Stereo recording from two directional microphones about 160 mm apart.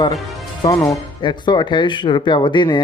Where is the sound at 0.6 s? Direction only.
20° left (ahead or behind).